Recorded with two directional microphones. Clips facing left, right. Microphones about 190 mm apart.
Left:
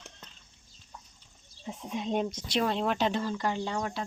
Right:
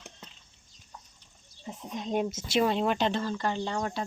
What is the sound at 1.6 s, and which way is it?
Speech, centre (ahead or behind).